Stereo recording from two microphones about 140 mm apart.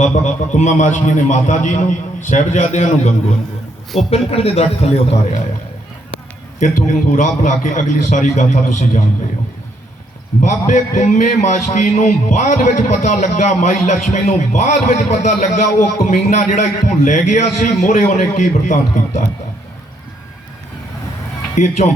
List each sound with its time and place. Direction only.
0.5 s a man's voice: 60° left (ahead or behind)
4.1 s a man's voice: 45° left (ahead or behind)
6.6 s a man's voice: 60° left (ahead or behind)
10.4 s a man's voice: 60° left (ahead or behind)
21.5 s speech: 60° left (ahead or behind)